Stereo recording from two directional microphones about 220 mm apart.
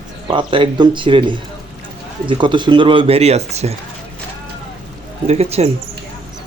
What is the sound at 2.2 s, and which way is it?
A man's voice, 20° right (ahead or behind).